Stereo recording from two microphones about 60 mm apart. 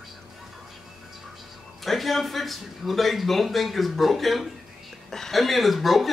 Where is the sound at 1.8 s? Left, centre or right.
Centre.